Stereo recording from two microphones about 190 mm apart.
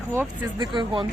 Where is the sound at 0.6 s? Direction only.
25° right (ahead or behind).